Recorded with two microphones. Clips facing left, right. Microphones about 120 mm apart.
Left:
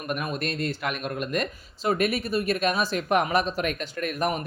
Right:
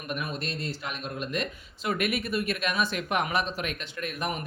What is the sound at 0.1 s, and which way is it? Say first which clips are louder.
Speech: left 4 dB; 50° left (ahead or behind).